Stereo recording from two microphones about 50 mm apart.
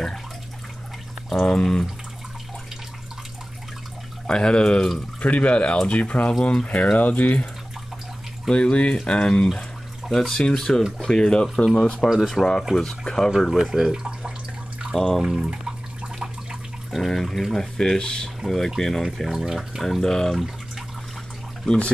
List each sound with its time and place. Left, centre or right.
1.4 s speech: centre
4.3 s speech: centre
8.5 s speech: left
9.5 s a sound: centre
10.1 s speech: centre
11.7 s speech: centre
13.4 s speech: centre
15.0 s speech: centre
15.2 s a sound: centre
16.9 s speech: centre
19.1 s speech: centre
21.6 s speech: centre